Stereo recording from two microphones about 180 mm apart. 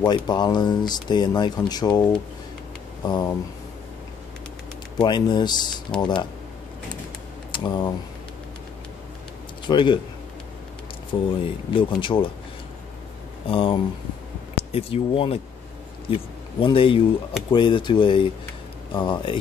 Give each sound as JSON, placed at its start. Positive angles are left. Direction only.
{"t": 0.0, "sound": "speech", "side_deg": 25}
{"t": 5.0, "sound": "speech", "side_deg": 25}
{"t": 7.5, "sound": "speech", "side_deg": 25}
{"t": 9.7, "sound": "speech", "side_deg": 25}
{"t": 11.1, "sound": "speech", "side_deg": 30}
{"t": 13.5, "sound": "speech", "side_deg": 30}